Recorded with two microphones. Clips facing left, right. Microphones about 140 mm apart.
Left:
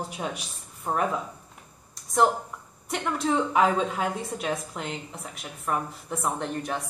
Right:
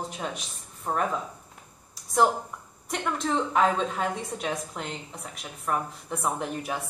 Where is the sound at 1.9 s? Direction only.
Centre (ahead or behind).